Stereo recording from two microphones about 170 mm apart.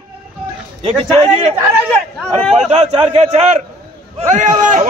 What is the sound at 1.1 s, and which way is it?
Speech, 40° right (ahead or behind).